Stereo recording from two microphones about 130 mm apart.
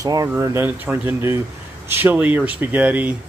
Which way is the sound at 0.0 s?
30° right (ahead or behind).